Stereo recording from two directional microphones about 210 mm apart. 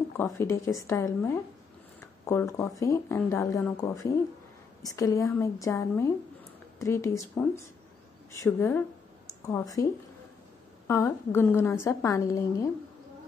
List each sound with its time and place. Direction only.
0.2 s a woman's voice: 15° left (ahead or behind)
10.9 s a woman's voice: 10° left (ahead or behind)